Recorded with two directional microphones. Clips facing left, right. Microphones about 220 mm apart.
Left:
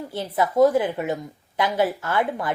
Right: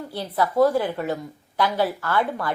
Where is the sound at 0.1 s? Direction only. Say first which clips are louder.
Left 1 dB; 20° left (ahead or behind).